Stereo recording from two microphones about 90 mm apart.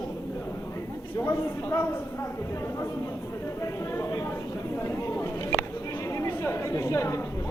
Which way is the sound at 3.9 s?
35° left (ahead or behind).